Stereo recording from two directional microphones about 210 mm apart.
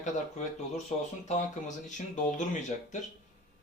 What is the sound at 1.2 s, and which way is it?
Speech, 35° left (ahead or behind).